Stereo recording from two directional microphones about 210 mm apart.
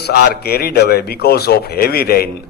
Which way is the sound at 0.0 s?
50° left (ahead or behind).